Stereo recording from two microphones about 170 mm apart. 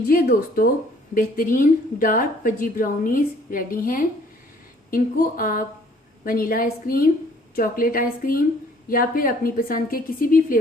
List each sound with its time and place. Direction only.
0.1 s a woman's voice: 60° left (ahead or behind)